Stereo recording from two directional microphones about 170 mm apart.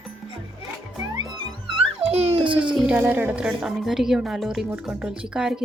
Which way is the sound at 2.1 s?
35° right (ahead or behind).